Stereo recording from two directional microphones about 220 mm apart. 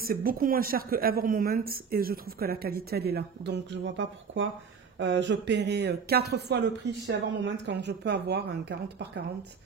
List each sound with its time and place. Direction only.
0.0 s a woman's voice: 40° right (ahead or behind)